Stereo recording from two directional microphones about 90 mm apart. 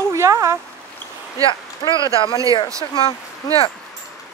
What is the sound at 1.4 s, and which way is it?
Speech, 60° left (ahead or behind).